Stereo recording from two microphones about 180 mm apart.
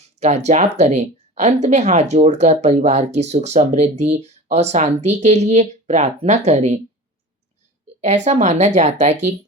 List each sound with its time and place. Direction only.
0.2 s speech: 40° right (ahead or behind)
8.0 s speech: 40° right (ahead or behind)